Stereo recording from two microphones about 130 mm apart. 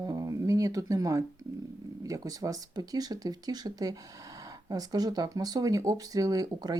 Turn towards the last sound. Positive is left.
turn(degrees=-30)  # may be behind; listen again after turning